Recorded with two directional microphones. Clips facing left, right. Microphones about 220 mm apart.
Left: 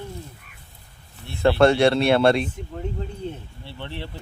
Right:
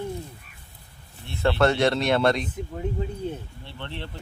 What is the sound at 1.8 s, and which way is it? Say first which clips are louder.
Speech: left 4 dB; 10° left (ahead or behind).